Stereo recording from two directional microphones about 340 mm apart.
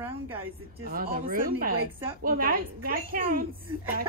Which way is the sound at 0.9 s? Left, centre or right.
Right.